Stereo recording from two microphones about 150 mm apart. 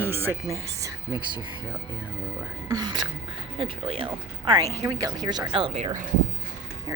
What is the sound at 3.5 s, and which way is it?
Speech, 35° right (ahead or behind).